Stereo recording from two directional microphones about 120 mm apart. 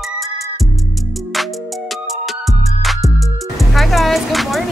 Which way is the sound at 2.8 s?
Centre (ahead or behind).